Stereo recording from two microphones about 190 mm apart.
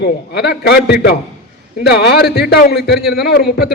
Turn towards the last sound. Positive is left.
turn(degrees=60)  # may be behind; listen again after turning